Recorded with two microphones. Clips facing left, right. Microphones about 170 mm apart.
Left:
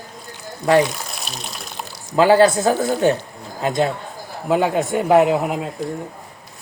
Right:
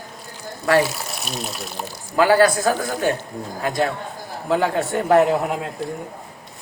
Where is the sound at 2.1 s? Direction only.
25° left (ahead or behind).